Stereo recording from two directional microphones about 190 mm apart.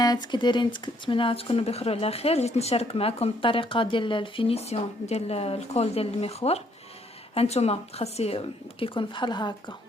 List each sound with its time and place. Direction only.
0.0 s speech: 20° left (ahead or behind)